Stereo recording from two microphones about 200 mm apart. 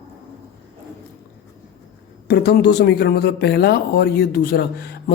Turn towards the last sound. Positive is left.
turn(degrees=55)  # may be behind; listen again after turning